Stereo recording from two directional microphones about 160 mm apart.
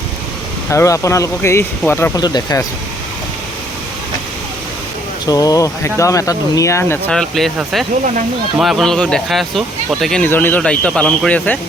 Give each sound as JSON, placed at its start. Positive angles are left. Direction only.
{"t": 0.7, "sound": "speech", "side_deg": 20}
{"t": 5.2, "sound": "speech", "side_deg": 25}
{"t": 7.1, "sound": "speech", "side_deg": 0}
{"t": 10.2, "sound": "speech", "side_deg": 10}